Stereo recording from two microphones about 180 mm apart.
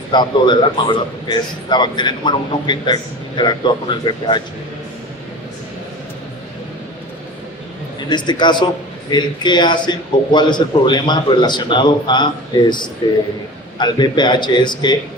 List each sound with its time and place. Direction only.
0.1 s a man's voice: 25° left (ahead or behind)
8.1 s a man's voice: 25° left (ahead or behind)